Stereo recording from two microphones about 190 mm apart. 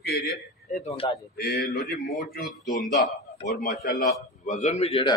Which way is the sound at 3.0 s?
55° left (ahead or behind).